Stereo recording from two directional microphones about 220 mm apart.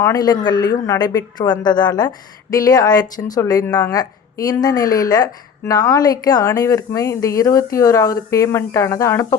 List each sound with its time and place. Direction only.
0.0 s a woman's voice: 15° left (ahead or behind)